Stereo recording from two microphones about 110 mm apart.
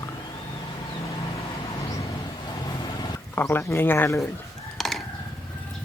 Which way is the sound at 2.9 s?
30° left (ahead or behind).